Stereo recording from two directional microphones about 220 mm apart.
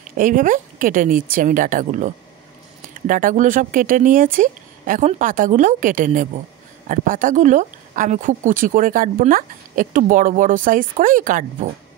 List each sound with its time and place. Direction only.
0.2 s speech: 35° right (ahead or behind)